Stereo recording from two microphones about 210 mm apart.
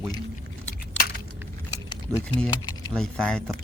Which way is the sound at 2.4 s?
15° left (ahead or behind).